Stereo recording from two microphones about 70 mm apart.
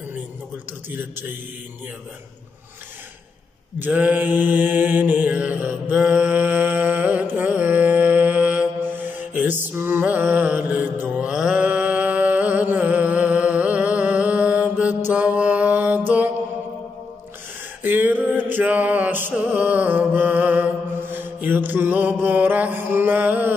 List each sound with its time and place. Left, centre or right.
0.8 s a man's voice: right
3.8 s mantra: right
11.1 s mantra: centre
12.7 s music: centre
17.8 s mantra: right
19.3 s music: right
21.0 s mantra: right